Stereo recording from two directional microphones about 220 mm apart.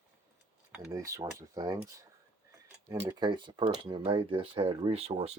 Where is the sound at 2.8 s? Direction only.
15° right (ahead or behind).